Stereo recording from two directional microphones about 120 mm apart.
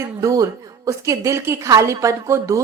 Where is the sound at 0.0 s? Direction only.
25° right (ahead or behind).